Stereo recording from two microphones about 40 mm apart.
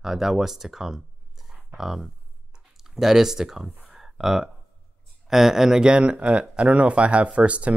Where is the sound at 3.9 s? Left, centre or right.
Centre.